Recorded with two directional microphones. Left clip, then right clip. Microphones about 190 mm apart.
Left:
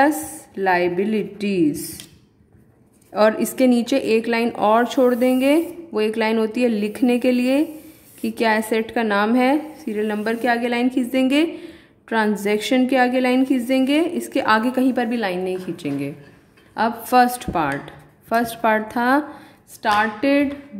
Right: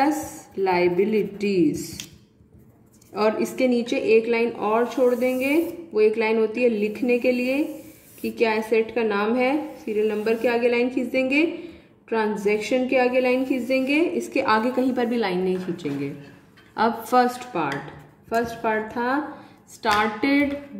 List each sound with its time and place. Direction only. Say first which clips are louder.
0.6 s a woman's voice: left 2 dB; 35° left (ahead or behind)
3.1 s a woman's voice: left 5 dB; 40° left (ahead or behind)
19.8 s a woman's voice: left 3 dB; 30° left (ahead or behind)